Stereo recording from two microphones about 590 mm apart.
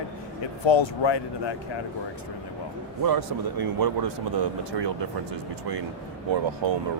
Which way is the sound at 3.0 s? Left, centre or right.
Right.